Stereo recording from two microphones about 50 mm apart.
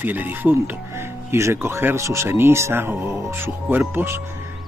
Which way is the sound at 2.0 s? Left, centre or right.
Right.